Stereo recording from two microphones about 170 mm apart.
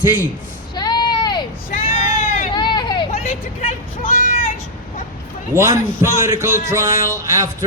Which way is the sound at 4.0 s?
55° left (ahead or behind).